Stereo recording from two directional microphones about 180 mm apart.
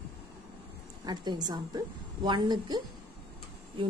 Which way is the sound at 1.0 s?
25° right (ahead or behind).